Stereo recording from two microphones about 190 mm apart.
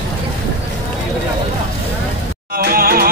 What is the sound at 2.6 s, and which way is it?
Music, 50° right (ahead or behind).